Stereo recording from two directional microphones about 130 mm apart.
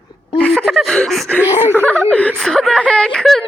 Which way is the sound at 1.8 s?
10° left (ahead or behind).